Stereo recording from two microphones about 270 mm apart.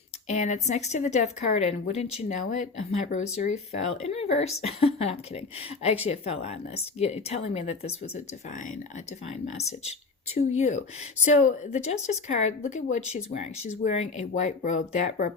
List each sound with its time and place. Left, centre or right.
0.3 s speech: left